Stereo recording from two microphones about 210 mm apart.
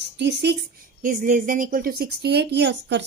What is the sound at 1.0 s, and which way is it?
Speech, 40° right (ahead or behind).